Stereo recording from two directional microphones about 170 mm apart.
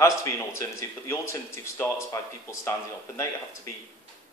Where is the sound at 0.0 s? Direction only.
20° left (ahead or behind).